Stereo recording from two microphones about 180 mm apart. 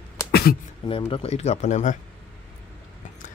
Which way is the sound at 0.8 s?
30° left (ahead or behind).